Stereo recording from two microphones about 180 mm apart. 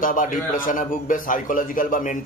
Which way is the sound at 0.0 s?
45° left (ahead or behind).